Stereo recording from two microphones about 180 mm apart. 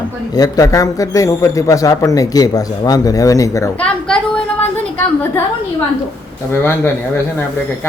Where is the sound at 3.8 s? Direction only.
5° left (ahead or behind).